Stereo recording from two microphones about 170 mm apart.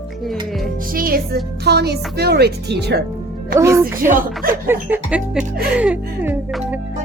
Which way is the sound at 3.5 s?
15° right (ahead or behind).